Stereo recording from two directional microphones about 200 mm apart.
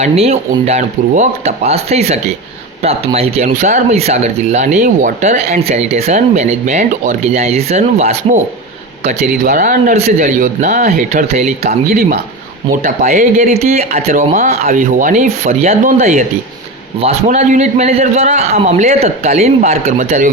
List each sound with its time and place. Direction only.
0.0 s speech: 30° right (ahead or behind)
9.4 s speech: 40° right (ahead or behind)
12.7 s speech: 45° right (ahead or behind)
17.0 s speech: 35° right (ahead or behind)